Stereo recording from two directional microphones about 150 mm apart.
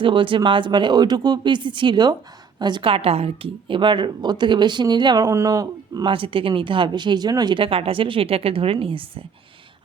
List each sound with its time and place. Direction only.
0.0 s speech: 35° right (ahead or behind)